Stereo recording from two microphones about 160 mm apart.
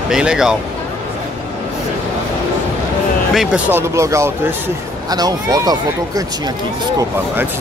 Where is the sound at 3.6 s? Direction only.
15° right (ahead or behind).